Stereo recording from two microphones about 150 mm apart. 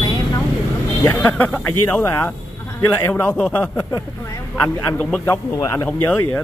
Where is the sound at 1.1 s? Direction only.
10° left (ahead or behind).